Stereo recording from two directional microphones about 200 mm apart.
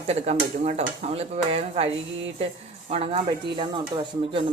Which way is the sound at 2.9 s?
30° right (ahead or behind).